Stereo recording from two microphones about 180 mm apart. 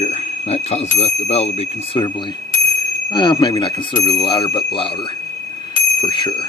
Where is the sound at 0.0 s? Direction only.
40° left (ahead or behind).